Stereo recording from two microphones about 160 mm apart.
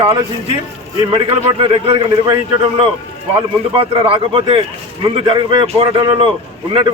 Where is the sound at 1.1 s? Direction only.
35° right (ahead or behind).